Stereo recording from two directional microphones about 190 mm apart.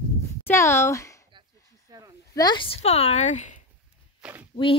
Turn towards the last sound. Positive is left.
turn(degrees=-5)  # may be behind; listen again after turning